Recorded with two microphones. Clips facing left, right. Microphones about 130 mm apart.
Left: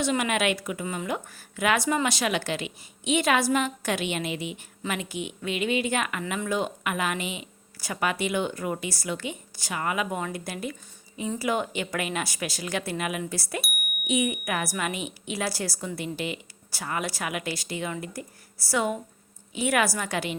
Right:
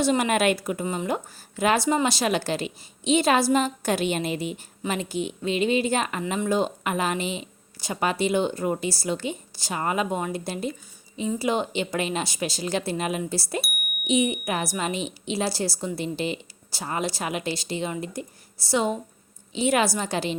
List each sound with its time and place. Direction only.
0.0 s speech: 35° right (ahead or behind)